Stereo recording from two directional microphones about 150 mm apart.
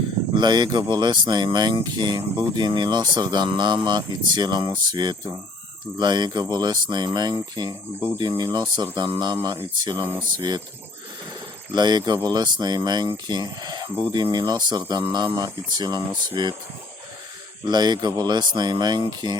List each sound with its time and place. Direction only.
0.3 s speech: 30° right (ahead or behind)
11.7 s speech: 30° right (ahead or behind)
17.7 s speech: 30° right (ahead or behind)